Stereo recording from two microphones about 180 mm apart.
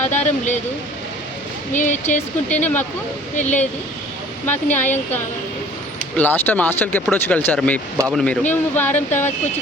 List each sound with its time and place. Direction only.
0.1 s speech: 40° left (ahead or behind)
1.7 s speech: 45° left (ahead or behind)
4.4 s speech: 10° left (ahead or behind)